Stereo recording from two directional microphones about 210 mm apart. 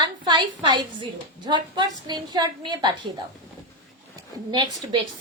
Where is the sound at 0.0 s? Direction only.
20° right (ahead or behind).